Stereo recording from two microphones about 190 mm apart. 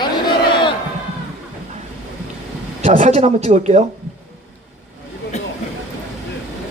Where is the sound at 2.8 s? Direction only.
40° right (ahead or behind).